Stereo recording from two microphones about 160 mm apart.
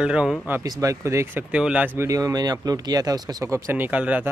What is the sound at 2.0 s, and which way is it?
Speech, 20° right (ahead or behind).